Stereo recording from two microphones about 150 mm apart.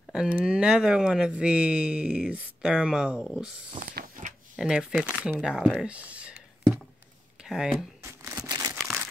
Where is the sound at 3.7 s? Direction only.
70° right (ahead or behind).